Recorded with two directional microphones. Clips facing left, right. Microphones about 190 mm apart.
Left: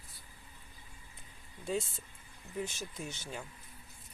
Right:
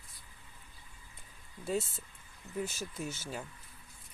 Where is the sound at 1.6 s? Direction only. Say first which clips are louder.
Right 1 dB; 5° right (ahead or behind).